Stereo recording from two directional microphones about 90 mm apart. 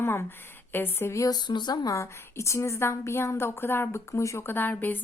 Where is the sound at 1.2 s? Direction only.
50° left (ahead or behind).